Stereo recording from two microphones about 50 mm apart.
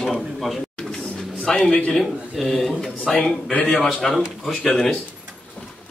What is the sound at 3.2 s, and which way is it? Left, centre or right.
Speech, left.